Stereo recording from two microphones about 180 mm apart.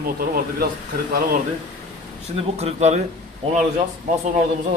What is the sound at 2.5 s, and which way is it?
Speech, 35° right (ahead or behind).